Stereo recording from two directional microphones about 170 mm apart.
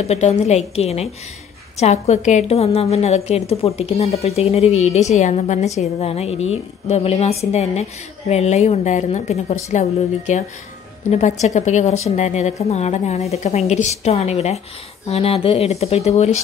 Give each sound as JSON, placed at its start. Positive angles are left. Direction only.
{"t": 0.0, "sound": "a woman's voice", "side_deg": 40}